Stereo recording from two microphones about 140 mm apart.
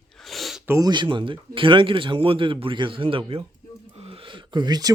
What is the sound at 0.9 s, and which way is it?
A man's voice, 35° right (ahead or behind).